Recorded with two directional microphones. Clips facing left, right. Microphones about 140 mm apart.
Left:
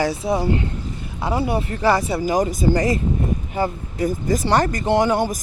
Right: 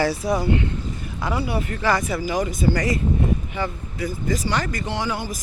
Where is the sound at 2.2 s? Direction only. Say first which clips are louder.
Left 3 dB; 40° left (ahead or behind).